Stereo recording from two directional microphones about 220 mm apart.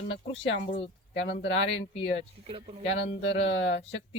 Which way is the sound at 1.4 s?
60° left (ahead or behind).